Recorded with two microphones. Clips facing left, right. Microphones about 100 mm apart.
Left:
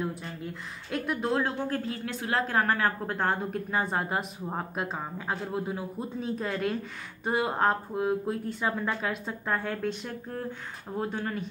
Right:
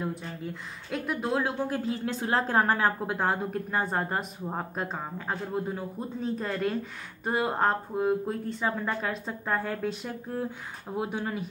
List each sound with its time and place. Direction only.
0.0 s speech: centre (ahead or behind)
2.0 s a woman's voice: 30° right (ahead or behind)
3.1 s speech: 5° right (ahead or behind)